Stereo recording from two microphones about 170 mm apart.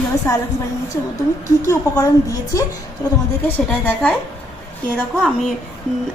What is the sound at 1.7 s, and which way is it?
Speech, 20° left (ahead or behind).